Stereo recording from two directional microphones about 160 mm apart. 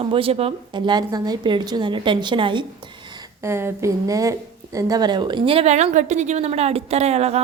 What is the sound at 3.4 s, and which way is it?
Speech, 15° right (ahead or behind).